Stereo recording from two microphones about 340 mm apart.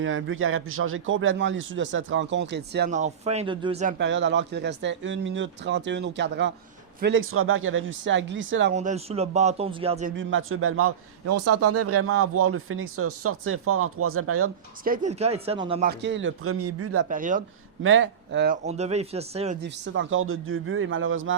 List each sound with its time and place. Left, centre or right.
0.0 s a man's voice: right
8.7 s speech: right
10.2 s a man's voice: right
14.8 s speech: right
15.9 s a man's voice: right
17.1 s speech: right
17.8 s speech: right; by 19.5 s centre
19.6 s a man's voice: right